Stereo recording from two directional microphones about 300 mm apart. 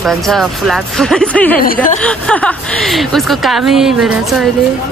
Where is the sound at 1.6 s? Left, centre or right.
Left.